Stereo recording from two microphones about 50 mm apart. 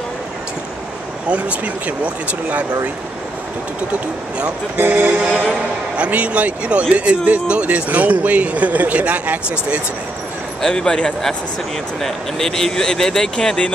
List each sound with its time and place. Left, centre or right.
1.3 s speech: right
4.7 s speech: right
5.9 s speech: right
10.6 s speech: centre